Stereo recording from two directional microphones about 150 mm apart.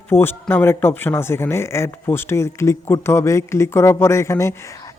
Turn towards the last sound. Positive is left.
turn(degrees=20)  # may be behind; listen again after turning